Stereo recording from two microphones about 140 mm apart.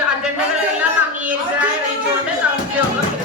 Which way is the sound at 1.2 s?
10° right (ahead or behind).